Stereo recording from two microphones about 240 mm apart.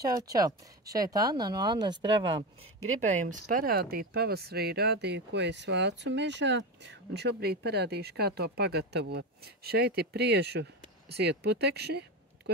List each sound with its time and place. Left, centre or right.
0.0 s speech: centre
3.1 s speech: right